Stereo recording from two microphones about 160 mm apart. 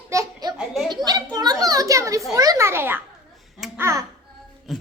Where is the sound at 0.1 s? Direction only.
20° right (ahead or behind).